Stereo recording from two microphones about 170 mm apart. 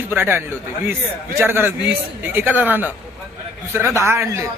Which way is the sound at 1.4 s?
15° right (ahead or behind).